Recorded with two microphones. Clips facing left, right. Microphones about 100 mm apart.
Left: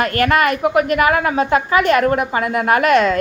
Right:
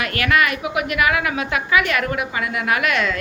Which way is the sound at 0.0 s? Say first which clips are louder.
Left 4 dB; 45° left (ahead or behind).